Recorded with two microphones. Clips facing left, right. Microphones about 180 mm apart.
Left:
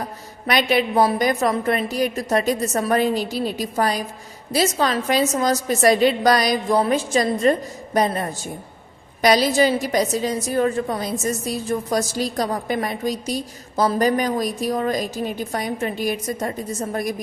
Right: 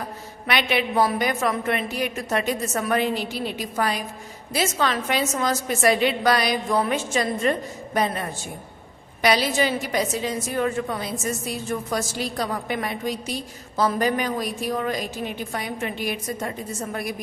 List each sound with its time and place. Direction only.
0.4 s a woman's voice: 40° left (ahead or behind)